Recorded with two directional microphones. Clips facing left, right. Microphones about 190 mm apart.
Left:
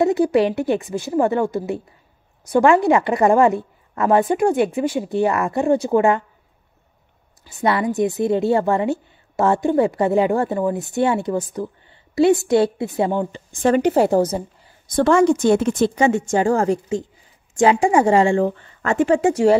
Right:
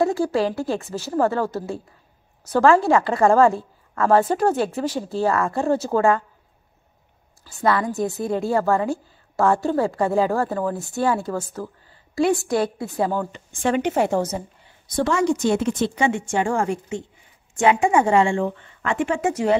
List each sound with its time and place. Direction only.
0.0 s a woman's voice: 20° left (ahead or behind)
7.4 s a woman's voice: 25° left (ahead or behind)
13.5 s speech: 40° left (ahead or behind)
15.0 s speech: 55° left (ahead or behind); by 19.5 s 30° left (ahead or behind)